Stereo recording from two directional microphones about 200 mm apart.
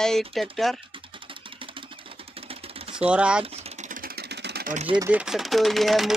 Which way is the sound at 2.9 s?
5° right (ahead or behind).